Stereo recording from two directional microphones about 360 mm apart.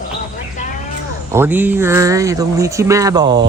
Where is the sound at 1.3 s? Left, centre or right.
Centre.